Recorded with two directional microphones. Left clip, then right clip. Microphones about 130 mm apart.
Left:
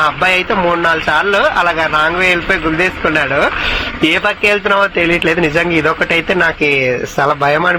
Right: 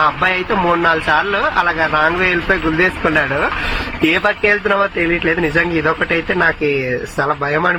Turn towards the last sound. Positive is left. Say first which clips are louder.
# left 4 dB
turn(degrees=15)  # may be behind; listen again after turning